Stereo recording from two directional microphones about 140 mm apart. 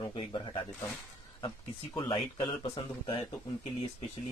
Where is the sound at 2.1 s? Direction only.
35° left (ahead or behind).